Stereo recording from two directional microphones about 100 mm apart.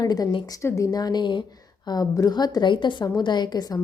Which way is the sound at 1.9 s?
40° left (ahead or behind).